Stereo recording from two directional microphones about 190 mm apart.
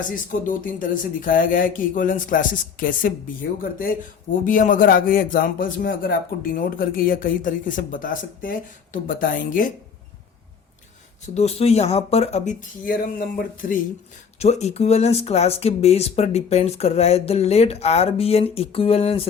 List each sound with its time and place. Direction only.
0.0 s a man's voice: 45° left (ahead or behind)
11.3 s speech: 35° left (ahead or behind)
14.3 s speech: 35° left (ahead or behind)